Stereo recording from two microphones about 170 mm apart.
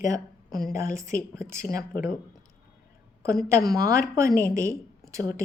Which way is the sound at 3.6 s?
20° right (ahead or behind).